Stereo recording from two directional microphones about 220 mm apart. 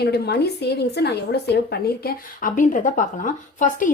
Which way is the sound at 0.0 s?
45° left (ahead or behind).